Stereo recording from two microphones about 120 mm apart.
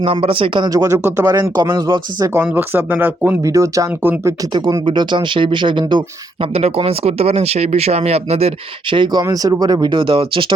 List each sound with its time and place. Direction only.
0.0 s speech: 50° right (ahead or behind)
0.7 s speech: 25° right (ahead or behind)
2.4 s speech: 15° right (ahead or behind)
4.5 s speech: 40° right (ahead or behind)
9.2 s speech: 30° right (ahead or behind); by 10.5 s 45° right (ahead or behind)